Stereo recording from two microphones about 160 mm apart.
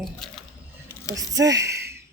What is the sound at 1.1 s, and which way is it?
Speech, 20° right (ahead or behind).